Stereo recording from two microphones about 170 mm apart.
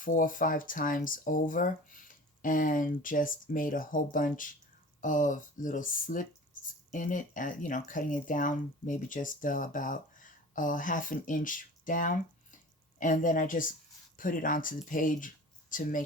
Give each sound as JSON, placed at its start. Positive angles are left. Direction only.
{"t": 0.0, "sound": "speech", "side_deg": 55}